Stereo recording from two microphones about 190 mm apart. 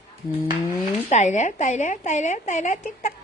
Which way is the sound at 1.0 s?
40° left (ahead or behind).